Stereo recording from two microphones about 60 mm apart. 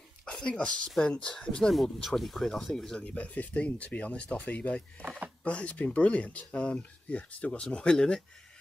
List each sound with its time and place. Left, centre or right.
0.2 s speech: centre
1.7 s speech: centre
3.0 s speech: left